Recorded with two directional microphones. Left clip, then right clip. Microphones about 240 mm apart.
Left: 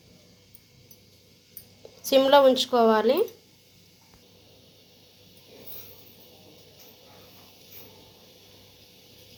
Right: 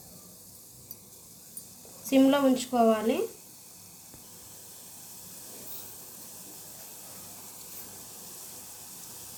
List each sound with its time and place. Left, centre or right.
2.0 s a woman's voice: left